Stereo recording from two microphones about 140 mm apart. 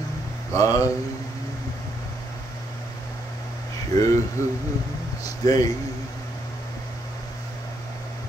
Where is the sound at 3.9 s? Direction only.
25° left (ahead or behind).